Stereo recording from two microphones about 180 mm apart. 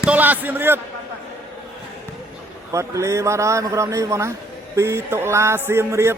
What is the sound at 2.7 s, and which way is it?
A man's voice, 15° right (ahead or behind).